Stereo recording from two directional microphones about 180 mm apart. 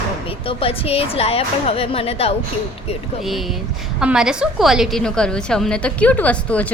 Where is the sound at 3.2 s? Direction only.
Centre (ahead or behind).